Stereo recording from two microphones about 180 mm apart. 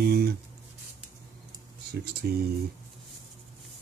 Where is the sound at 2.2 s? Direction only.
60° right (ahead or behind).